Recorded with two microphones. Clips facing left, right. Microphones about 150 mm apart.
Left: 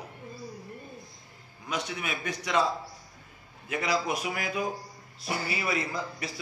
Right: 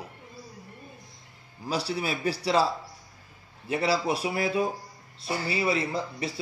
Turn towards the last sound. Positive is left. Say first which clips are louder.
# right 4 dB
turn(degrees=-30)  # may be behind; listen again after turning